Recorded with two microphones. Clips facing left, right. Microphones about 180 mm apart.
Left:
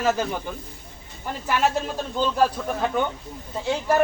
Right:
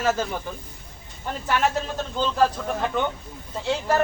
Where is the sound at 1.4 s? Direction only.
10° left (ahead or behind).